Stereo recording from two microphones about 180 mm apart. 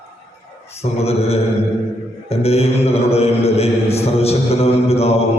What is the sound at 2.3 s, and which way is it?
Mantra, 35° left (ahead or behind).